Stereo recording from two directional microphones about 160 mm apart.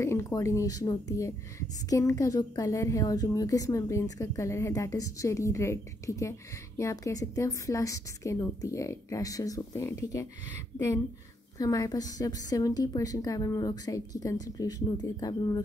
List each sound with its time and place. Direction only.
0.0 s a woman's voice: 15° left (ahead or behind)
11.5 s a woman's voice: 20° left (ahead or behind)